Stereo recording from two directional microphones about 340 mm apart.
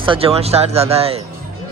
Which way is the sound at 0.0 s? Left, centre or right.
Centre.